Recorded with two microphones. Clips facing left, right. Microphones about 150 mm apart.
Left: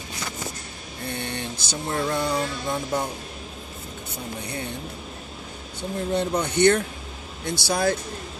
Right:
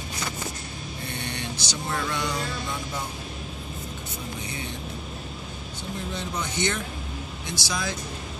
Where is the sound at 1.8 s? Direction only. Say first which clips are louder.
Left 5 dB; 35° left (ahead or behind).